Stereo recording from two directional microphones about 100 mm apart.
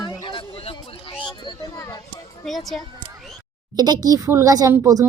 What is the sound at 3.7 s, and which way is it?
Speech, 40° right (ahead or behind).